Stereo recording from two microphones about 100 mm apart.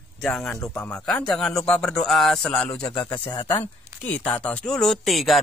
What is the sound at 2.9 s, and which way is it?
Speech, 50° left (ahead or behind).